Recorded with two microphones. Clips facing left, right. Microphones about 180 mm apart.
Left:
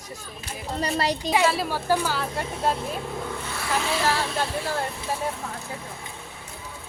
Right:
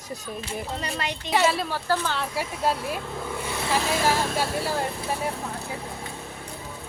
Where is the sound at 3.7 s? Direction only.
45° right (ahead or behind).